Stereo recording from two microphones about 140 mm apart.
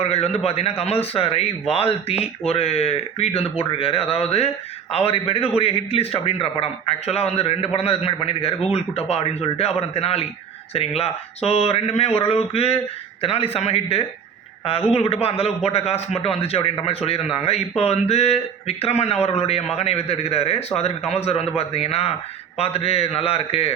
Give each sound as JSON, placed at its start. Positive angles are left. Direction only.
{"t": 0.0, "sound": "speech", "side_deg": 50}